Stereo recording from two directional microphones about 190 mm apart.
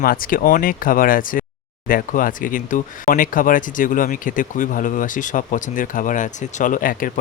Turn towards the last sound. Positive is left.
turn(degrees=45)  # may be behind; listen again after turning